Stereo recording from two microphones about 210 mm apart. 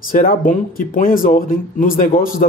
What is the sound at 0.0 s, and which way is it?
Speech, 40° left (ahead or behind).